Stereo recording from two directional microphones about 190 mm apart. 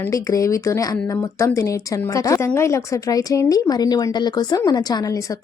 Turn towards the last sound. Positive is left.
turn(degrees=20)  # may be behind; listen again after turning